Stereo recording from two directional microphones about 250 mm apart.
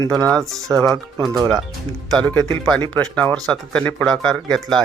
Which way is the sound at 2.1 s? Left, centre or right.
Centre.